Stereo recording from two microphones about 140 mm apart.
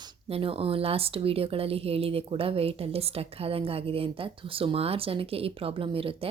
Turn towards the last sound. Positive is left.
turn(degrees=-40)  # may be behind; listen again after turning